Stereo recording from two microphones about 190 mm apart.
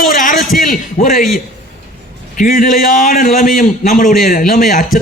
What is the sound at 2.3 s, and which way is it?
Speech, 45° left (ahead or behind).